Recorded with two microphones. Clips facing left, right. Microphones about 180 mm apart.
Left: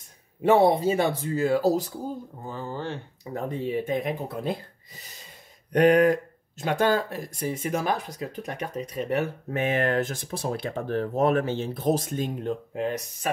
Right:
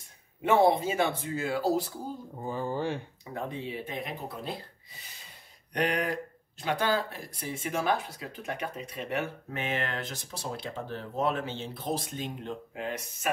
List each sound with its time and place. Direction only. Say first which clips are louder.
0.4 s speech: left 4 dB; 35° left (ahead or behind)
2.4 s speech: right 3 dB; 15° right (ahead or behind)
3.3 s speech: left 7 dB; 45° left (ahead or behind)